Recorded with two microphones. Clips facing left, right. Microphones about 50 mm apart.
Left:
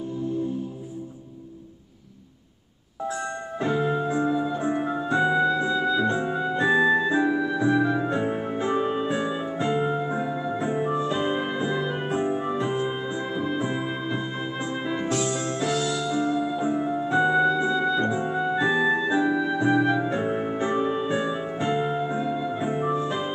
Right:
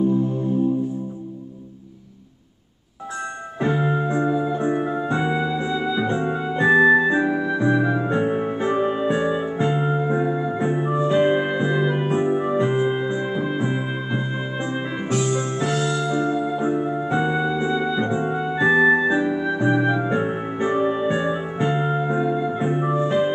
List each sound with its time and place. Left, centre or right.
3.6 s keyboard: centre
4.3 s music: centre; by 16.3 s right
16.4 s music: centre